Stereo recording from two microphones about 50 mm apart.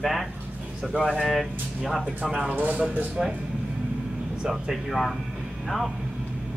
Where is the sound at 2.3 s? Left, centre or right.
Right.